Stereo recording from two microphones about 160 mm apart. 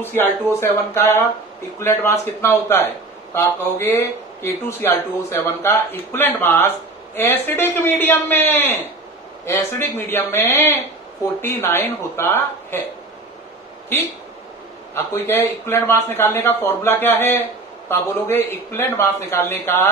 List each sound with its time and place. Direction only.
0.0 s speech: 15° left (ahead or behind)
15.0 s speech: 15° left (ahead or behind)